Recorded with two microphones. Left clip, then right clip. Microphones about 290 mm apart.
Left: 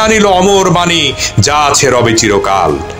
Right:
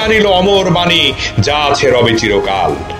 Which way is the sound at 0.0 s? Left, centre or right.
Left.